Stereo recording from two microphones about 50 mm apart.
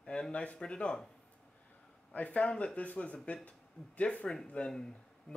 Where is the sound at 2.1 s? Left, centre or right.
Left.